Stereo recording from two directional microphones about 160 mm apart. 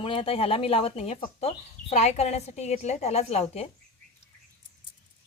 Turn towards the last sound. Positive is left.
turn(degrees=40)  # may be behind; listen again after turning